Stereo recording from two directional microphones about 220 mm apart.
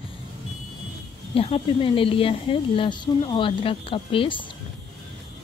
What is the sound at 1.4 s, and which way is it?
Speech, 25° left (ahead or behind).